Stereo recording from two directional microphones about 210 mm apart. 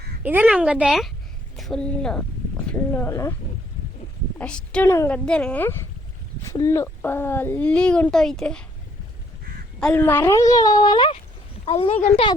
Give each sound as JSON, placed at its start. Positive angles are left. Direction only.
{"t": 0.2, "sound": "speech", "side_deg": -5}
{"t": 4.4, "sound": "a child's voice", "side_deg": 5}
{"t": 9.8, "sound": "a child's voice", "side_deg": 10}